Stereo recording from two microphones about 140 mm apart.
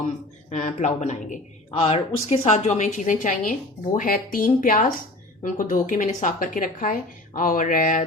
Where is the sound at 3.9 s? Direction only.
85° left.